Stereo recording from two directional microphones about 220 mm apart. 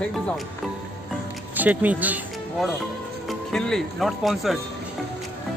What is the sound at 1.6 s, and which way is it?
Speech, 5° right (ahead or behind).